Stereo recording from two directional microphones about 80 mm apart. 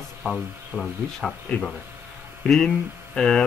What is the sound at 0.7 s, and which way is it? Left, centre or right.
Speech, left.